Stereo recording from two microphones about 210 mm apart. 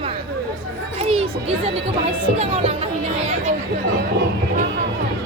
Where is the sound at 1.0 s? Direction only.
25° right (ahead or behind).